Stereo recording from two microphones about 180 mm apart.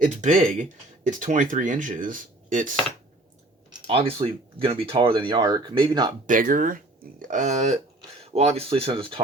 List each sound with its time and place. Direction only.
0.0 s speech: 45° right (ahead or behind)
3.7 s speech: 30° right (ahead or behind)
6.2 s speech: 50° right (ahead or behind); by 9.2 s 30° right (ahead or behind)